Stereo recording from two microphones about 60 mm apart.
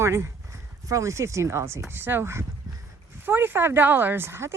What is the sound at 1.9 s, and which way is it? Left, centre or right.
Speech, right.